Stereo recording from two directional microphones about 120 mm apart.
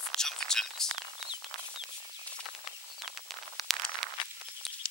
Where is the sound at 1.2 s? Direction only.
40° left (ahead or behind).